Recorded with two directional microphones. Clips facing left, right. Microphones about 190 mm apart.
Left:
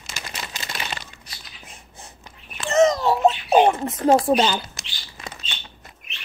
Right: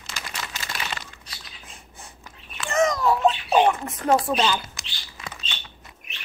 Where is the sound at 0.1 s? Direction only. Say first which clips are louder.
Even; 20° left (ahead or behind).